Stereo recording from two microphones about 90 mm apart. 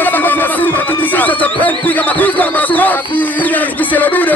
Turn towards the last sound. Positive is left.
turn(degrees=20)  # may be behind; listen again after turning